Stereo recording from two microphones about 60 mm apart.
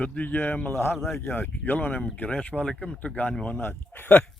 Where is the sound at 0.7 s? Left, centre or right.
Left.